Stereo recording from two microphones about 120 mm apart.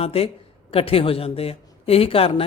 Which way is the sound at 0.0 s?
55° left (ahead or behind).